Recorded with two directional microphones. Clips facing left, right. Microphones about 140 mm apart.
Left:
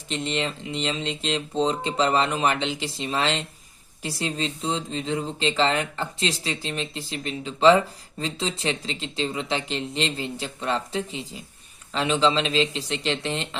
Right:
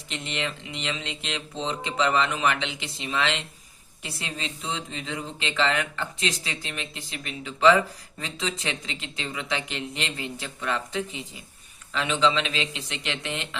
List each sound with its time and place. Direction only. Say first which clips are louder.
0.1 s speech: left 5 dB; 30° left (ahead or behind)